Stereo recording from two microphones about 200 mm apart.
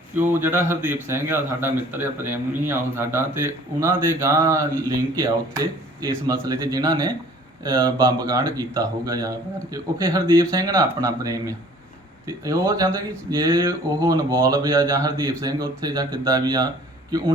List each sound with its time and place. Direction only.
0.2 s a man's voice: 10° right (ahead or behind)